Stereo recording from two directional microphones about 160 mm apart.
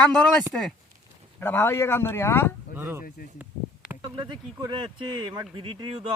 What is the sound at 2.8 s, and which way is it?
Speech, 15° right (ahead or behind).